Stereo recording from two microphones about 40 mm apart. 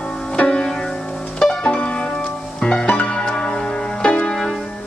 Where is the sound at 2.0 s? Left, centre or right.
Left.